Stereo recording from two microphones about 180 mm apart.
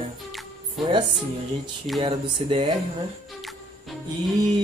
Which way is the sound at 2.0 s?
30° right (ahead or behind).